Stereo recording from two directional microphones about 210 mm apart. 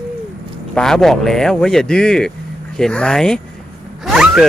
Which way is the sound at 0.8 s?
Centre (ahead or behind).